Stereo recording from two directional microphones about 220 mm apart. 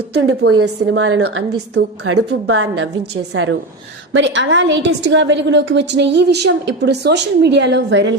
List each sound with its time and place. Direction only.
0.1 s a woman's voice: 55° right (ahead or behind)